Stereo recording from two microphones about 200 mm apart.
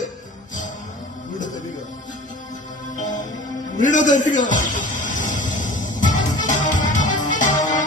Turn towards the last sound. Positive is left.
turn(degrees=40)  # may be behind; listen again after turning